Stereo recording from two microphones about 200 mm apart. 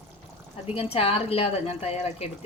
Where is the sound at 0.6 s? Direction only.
30° left (ahead or behind).